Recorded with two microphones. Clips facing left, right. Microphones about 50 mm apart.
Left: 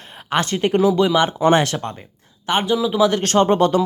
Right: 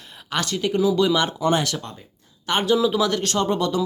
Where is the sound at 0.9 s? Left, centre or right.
Left.